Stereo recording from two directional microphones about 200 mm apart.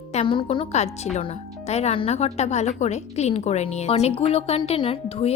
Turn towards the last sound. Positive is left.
turn(degrees=30)  # may be behind; listen again after turning